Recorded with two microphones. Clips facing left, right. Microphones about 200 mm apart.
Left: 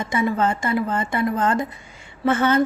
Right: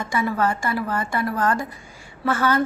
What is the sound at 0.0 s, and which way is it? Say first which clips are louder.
A woman's voice: left 2 dB; 20° left (ahead or behind).